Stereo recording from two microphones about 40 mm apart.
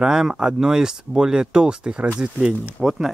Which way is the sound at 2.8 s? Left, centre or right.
Centre.